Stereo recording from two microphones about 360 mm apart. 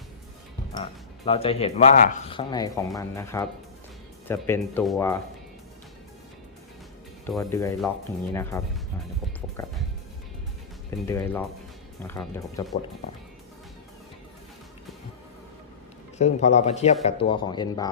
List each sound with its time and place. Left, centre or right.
0.7 s speech: centre
7.3 s speech: centre
11.1 s speech: centre
16.1 s speech: centre